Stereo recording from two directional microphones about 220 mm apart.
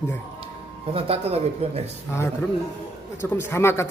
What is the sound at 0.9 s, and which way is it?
Speech, 25° right (ahead or behind).